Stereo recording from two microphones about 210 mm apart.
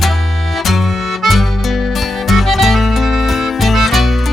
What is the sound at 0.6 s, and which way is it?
Music, centre (ahead or behind).